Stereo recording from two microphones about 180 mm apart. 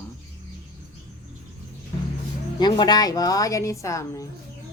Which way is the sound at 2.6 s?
25° left (ahead or behind).